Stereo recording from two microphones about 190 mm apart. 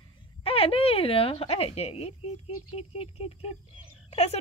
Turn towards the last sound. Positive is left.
turn(degrees=35)  # may be behind; listen again after turning